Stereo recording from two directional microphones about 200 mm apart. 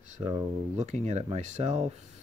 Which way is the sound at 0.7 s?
35° right (ahead or behind).